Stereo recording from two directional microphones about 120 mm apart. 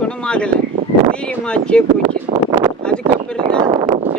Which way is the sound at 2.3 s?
65° right (ahead or behind).